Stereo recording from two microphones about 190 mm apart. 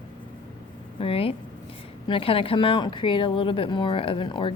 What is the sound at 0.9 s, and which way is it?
Speech, 30° left (ahead or behind).